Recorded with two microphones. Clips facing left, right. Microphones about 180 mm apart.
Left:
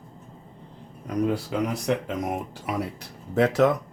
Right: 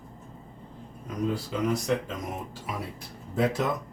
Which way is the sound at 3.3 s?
75° left (ahead or behind).